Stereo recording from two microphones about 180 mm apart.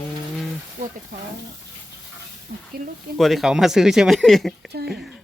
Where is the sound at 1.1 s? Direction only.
50° right (ahead or behind).